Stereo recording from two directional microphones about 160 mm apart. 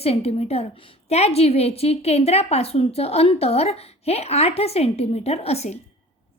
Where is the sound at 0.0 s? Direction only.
40° left (ahead or behind).